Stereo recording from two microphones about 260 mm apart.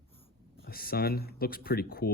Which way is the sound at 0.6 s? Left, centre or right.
Left.